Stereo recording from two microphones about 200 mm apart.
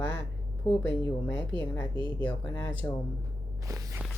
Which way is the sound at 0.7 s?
25° left (ahead or behind).